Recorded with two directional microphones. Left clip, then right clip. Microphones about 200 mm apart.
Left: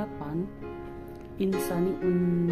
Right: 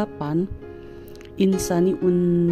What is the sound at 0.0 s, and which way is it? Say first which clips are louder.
Music: right 9 dB; 40° right (ahead or behind).